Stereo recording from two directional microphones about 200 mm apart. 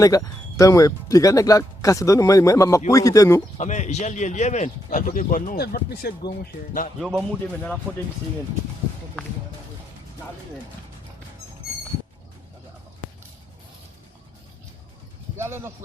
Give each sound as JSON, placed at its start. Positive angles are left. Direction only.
{"t": 0.0, "sound": "speech", "side_deg": 15}
{"t": 3.6, "sound": "speech", "side_deg": 35}
{"t": 7.0, "sound": "speech", "side_deg": 0}
{"t": 15.4, "sound": "speech", "side_deg": -10}